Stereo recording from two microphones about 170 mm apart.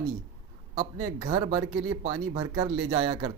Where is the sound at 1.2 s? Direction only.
25° right (ahead or behind).